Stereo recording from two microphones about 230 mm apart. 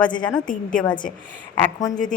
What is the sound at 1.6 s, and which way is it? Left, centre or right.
Speech, centre.